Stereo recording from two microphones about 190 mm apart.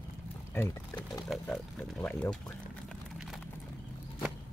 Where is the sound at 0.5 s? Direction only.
15° left (ahead or behind).